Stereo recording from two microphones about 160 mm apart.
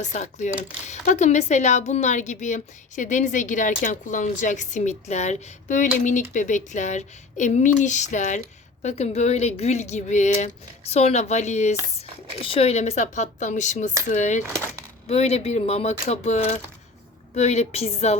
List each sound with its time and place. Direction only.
0.0 s a woman's voice: 50° left (ahead or behind)